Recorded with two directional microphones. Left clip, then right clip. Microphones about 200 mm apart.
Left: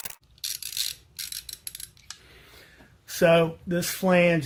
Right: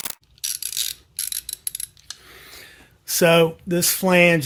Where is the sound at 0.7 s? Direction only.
25° right (ahead or behind).